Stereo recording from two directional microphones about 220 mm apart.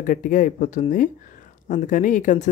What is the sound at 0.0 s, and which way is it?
Speech, 35° left (ahead or behind).